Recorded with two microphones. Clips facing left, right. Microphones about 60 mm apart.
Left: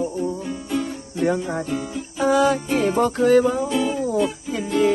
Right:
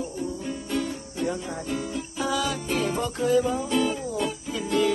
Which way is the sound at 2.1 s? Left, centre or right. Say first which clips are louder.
Left 10 dB; left.